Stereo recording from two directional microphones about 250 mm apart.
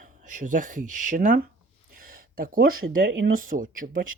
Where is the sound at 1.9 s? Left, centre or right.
Right.